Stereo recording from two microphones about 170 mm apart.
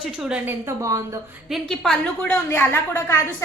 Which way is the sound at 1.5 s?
Centre (ahead or behind).